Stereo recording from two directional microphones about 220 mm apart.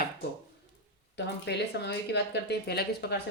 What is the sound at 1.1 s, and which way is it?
Speech, 50° left (ahead or behind).